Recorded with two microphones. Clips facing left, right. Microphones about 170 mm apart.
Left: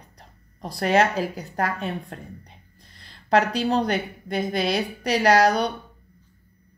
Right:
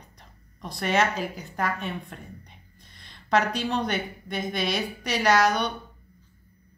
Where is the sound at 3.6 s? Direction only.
35° left (ahead or behind).